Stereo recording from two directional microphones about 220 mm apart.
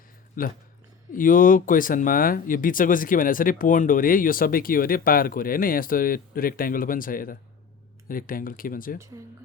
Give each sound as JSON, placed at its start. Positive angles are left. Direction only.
{"t": 0.4, "sound": "speech", "side_deg": 40}
{"t": 9.0, "sound": "speech", "side_deg": -15}